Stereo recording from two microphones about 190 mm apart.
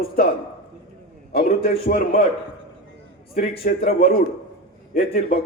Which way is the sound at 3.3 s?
50° left (ahead or behind).